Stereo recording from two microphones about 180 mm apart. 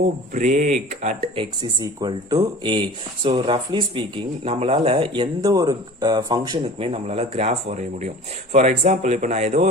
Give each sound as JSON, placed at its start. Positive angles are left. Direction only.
{"t": 0.3, "sound": "speech", "side_deg": -45}
{"t": 1.8, "sound": "speech", "side_deg": -20}